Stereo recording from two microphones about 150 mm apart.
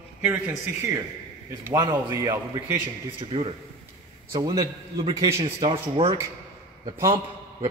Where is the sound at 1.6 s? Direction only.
25° right (ahead or behind).